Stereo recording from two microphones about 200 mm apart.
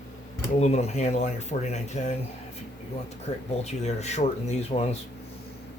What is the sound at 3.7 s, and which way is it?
Speech, 35° left (ahead or behind).